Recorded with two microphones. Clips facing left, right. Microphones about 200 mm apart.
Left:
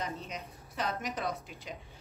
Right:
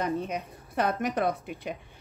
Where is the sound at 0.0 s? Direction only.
55° right (ahead or behind).